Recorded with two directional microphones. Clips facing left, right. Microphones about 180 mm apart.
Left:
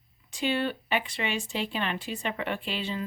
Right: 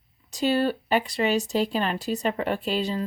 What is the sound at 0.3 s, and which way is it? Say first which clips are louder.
Speech: right 5 dB; 40° right (ahead or behind).